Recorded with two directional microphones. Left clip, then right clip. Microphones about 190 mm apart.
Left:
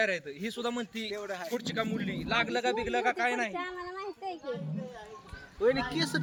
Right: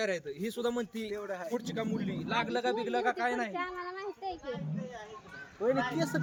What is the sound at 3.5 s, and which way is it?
Speech, 45° left (ahead or behind).